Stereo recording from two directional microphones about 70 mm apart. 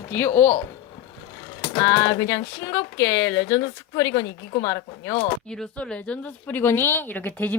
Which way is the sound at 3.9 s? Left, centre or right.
Left.